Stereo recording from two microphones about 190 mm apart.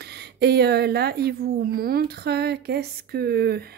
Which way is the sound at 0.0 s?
60° right (ahead or behind).